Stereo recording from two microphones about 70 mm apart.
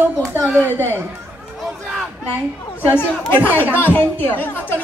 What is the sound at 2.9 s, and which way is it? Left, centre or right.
Speech, left.